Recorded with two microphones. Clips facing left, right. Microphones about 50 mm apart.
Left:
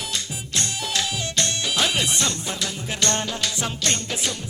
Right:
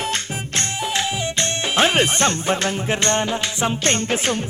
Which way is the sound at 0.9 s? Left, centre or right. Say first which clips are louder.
Right 2 dB; right.